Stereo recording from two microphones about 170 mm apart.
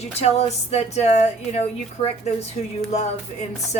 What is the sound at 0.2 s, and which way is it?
Speech, 40° left (ahead or behind).